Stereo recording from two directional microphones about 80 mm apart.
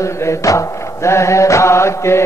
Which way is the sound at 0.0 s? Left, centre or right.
Left.